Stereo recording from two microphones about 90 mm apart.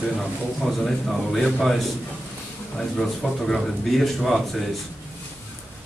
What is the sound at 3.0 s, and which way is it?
Speech, 5° left (ahead or behind).